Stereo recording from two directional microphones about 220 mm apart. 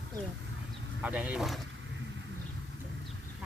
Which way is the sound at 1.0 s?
5° right (ahead or behind).